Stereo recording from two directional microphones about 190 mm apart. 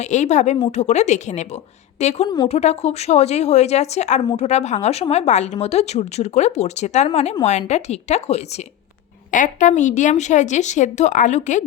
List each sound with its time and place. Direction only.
0.0 s speech: 40° left (ahead or behind)
2.2 s a woman's voice: 20° left (ahead or behind)
2.5 s speech: 35° left (ahead or behind)